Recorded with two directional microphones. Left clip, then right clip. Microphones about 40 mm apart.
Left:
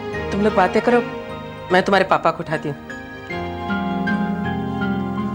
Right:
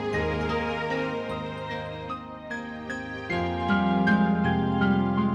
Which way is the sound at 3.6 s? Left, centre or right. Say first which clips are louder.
Left 1 dB; right.